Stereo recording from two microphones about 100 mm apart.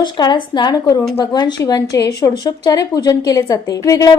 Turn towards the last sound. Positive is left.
turn(degrees=35)  # may be behind; listen again after turning